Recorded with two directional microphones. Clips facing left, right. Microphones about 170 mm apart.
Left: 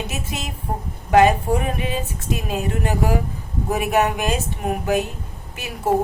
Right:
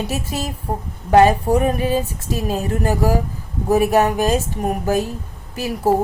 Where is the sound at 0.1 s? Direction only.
35° right (ahead or behind).